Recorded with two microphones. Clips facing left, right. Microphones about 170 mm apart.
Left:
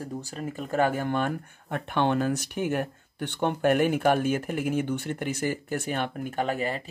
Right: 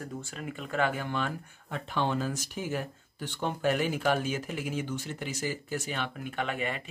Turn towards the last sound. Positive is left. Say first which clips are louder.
# left 5 dB
turn(degrees=35)  # may be behind; listen again after turning